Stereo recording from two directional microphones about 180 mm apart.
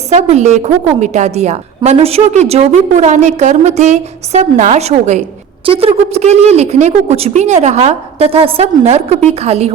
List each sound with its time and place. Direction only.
0.1 s a woman's voice: 40° right (ahead or behind)